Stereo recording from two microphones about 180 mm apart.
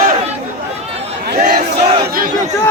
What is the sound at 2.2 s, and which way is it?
Speech, 50° right (ahead or behind).